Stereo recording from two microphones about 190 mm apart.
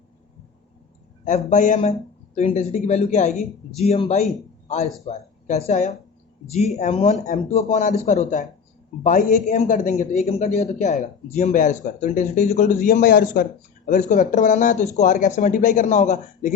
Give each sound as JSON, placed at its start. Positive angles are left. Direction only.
{"t": 1.5, "sound": "a man's voice", "side_deg": 40}